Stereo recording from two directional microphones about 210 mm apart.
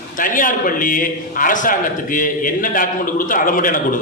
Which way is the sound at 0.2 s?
40° left (ahead or behind).